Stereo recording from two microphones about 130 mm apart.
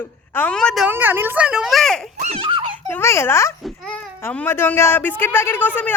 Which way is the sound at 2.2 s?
50° right (ahead or behind).